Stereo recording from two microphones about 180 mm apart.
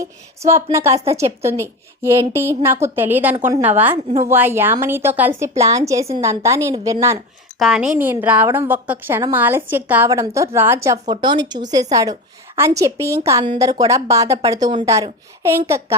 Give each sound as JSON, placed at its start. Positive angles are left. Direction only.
{"t": 0.0, "sound": "a woman's voice", "side_deg": -15}
{"t": 7.6, "sound": "a woman's voice", "side_deg": -5}